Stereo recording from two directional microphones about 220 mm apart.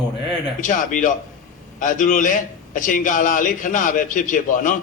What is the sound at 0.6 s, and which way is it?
A man's voice, 35° left (ahead or behind).